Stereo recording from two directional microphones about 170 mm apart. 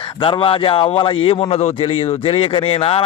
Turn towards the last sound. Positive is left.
turn(degrees=35)  # may be behind; listen again after turning